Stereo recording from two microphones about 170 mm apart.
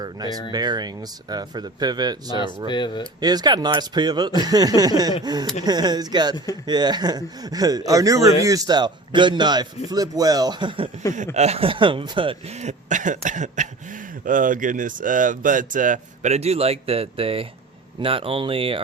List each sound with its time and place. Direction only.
0.0 s speech: 25° right (ahead or behind)
2.6 s speech: 25° left (ahead or behind)
3.2 s speech: 25° right (ahead or behind)
6.3 s speech: 20° left (ahead or behind)
6.7 s speech: 25° right (ahead or behind)
11.3 s speech: 40° right (ahead or behind)